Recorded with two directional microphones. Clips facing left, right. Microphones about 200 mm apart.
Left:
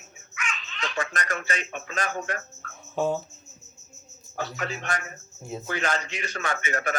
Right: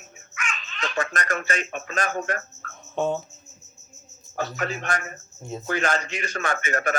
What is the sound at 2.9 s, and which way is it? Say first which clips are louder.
Speech: right 1 dB; 5° left (ahead or behind).